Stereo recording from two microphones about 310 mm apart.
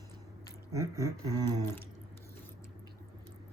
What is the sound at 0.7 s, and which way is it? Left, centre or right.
Speech, centre.